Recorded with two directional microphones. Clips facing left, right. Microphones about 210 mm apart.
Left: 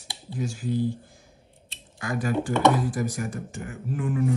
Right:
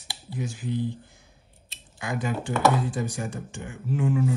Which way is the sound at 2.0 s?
25° right (ahead or behind).